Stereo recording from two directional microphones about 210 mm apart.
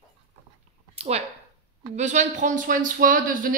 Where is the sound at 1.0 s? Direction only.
30° right (ahead or behind).